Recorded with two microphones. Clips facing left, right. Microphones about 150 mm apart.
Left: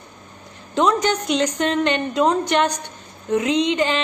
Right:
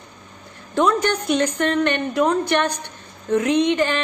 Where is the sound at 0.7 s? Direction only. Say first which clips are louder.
Even; 15° left (ahead or behind).